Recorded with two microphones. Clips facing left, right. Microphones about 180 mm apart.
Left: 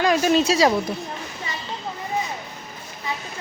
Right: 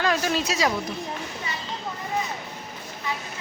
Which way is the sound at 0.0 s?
20° left (ahead or behind).